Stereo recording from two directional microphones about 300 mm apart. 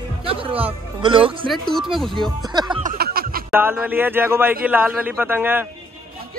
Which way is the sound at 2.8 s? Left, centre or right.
Right.